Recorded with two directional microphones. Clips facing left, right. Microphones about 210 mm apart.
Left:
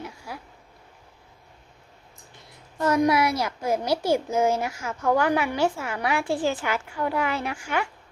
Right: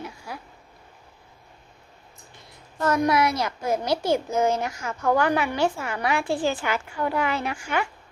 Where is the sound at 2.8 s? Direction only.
15° left (ahead or behind).